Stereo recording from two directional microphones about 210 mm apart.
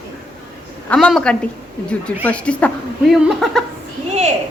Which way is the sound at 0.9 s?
5° left (ahead or behind).